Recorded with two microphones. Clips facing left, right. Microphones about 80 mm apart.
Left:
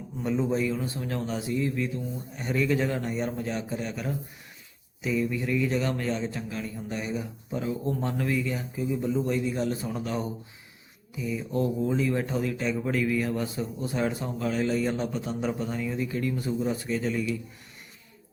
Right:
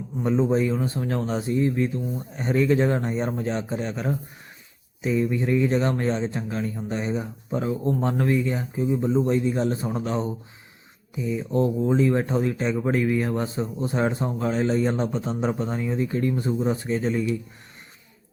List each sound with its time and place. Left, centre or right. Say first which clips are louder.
0.2 s speech: right 5 dB; right